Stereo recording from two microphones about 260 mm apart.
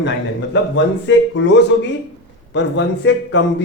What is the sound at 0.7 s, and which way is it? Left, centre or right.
A man's voice, left.